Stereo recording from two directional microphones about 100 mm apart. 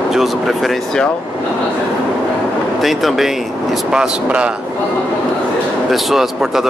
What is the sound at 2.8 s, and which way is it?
Speech, centre (ahead or behind).